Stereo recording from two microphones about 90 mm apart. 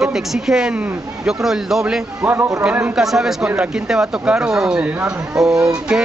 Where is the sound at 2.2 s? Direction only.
25° right (ahead or behind).